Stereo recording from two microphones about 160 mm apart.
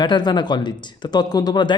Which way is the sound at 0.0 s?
25° left (ahead or behind).